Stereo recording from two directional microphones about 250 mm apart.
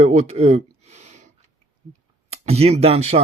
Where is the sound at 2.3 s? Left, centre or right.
Right.